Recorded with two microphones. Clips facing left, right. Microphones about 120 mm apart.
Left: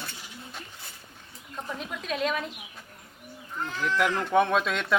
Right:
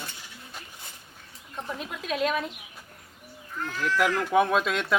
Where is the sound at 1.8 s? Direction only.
Centre (ahead or behind).